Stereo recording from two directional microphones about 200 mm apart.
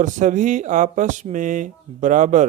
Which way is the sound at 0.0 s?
40° right (ahead or behind).